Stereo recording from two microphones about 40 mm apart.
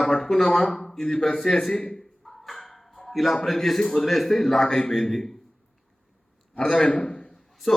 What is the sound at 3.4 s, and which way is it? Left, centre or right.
A man's voice, centre.